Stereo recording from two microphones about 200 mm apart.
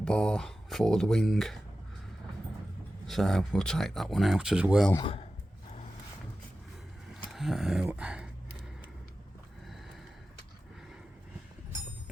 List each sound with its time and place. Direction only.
0.0 s speech: 5° left (ahead or behind)
3.1 s speech: centre (ahead or behind)
5.0 s a man's voice: 30° left (ahead or behind)
7.1 s a sound: centre (ahead or behind)